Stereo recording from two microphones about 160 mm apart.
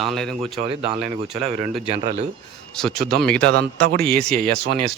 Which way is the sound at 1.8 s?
40° right (ahead or behind).